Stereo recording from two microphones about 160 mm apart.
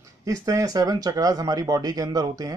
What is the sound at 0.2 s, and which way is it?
Speech, 20° right (ahead or behind).